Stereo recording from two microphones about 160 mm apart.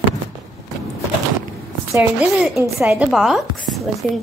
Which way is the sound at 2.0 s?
5° right (ahead or behind).